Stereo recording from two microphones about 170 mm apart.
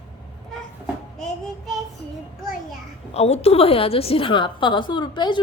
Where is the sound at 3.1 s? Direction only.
40° left (ahead or behind).